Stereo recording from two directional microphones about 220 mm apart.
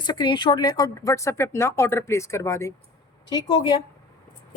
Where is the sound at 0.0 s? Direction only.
20° left (ahead or behind).